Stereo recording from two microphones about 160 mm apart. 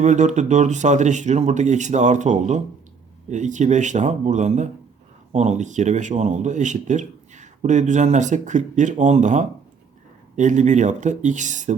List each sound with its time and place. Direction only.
0.0 s speech: 45° right (ahead or behind)